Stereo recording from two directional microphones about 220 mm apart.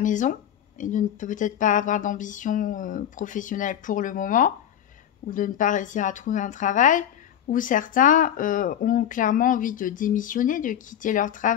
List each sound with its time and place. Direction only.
0.0 s speech: 35° left (ahead or behind)